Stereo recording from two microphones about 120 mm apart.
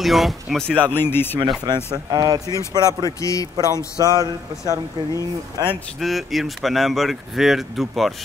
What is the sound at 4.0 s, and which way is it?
Speech, 30° right (ahead or behind).